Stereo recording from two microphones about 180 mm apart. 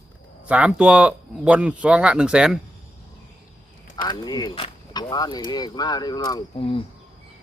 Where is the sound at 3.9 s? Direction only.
20° left (ahead or behind).